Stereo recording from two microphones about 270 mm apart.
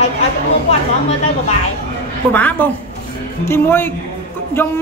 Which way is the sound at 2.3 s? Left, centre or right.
Centre.